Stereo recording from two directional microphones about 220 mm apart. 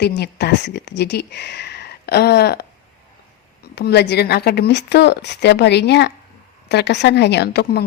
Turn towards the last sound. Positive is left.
turn(degrees=45)  # may be behind; listen again after turning